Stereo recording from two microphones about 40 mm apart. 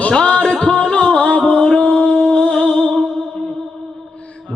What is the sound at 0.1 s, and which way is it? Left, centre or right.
Music, left.